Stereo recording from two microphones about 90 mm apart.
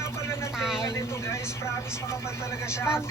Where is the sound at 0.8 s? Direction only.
30° left (ahead or behind).